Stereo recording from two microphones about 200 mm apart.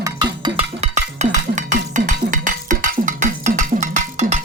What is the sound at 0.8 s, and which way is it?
Cowbell, 35° right (ahead or behind).